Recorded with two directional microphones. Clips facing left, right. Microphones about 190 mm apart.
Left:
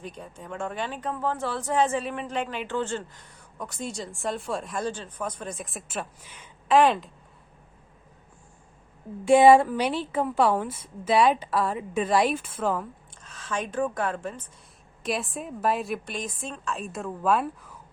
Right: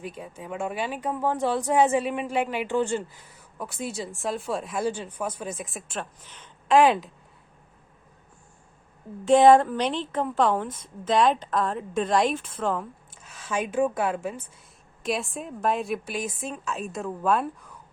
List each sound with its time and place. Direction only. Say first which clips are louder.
0.0 s speech: right 3 dB; 5° right (ahead or behind)
9.2 s a woman's voice: even; 10° left (ahead or behind)
13.1 s a woman's voice: right 3 dB; 10° right (ahead or behind)